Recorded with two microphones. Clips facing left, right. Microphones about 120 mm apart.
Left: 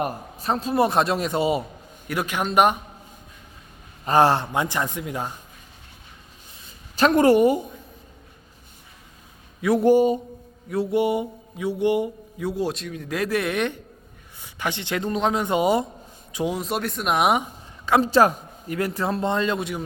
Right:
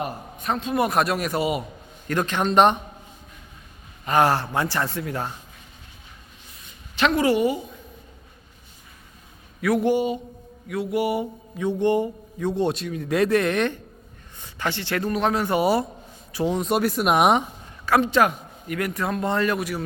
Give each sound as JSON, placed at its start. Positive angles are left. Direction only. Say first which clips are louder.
{"t": 0.0, "sound": "a man's voice", "louder": "left 2 dB", "side_deg": 35}
{"t": 2.0, "sound": "a man's voice", "louder": "right 2 dB", "side_deg": 10}
{"t": 4.0, "sound": "a man's voice", "louder": "left 2 dB", "side_deg": 30}
{"t": 6.7, "sound": "a woman's voice", "louder": "left 3 dB", "side_deg": 40}
{"t": 9.6, "sound": "speech", "louder": "left 1 dB", "side_deg": 25}
{"t": 9.8, "sound": "a sound", "louder": "left 8 dB", "side_deg": 40}
{"t": 10.7, "sound": "a man's voice", "louder": "left 2 dB", "side_deg": 30}
{"t": 16.6, "sound": "speech", "louder": "right 5 dB", "side_deg": 0}
{"t": 18.0, "sound": "a man's voice", "louder": "left 2 dB", "side_deg": 35}